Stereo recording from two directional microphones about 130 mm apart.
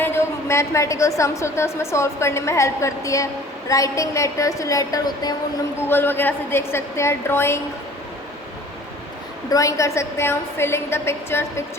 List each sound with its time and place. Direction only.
0.0 s a woman's voice: 20° left (ahead or behind)
5.9 s a woman's voice: 15° left (ahead or behind)
9.5 s a woman's voice: 25° left (ahead or behind)